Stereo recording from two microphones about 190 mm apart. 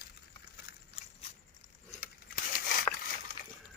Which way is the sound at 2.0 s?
50° left (ahead or behind).